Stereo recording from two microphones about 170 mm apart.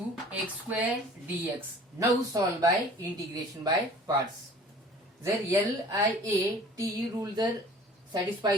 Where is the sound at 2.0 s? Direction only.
20° right (ahead or behind).